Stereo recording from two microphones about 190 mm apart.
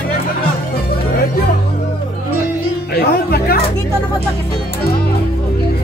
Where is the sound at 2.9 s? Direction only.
55° left (ahead or behind).